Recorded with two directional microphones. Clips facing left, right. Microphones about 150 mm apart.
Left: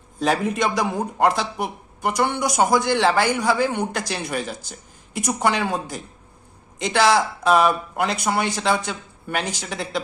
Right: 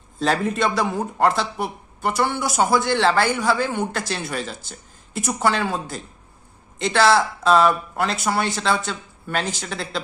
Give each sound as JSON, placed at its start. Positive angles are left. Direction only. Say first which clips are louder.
{"t": 0.2, "sound": "speech", "louder": "even", "side_deg": 10}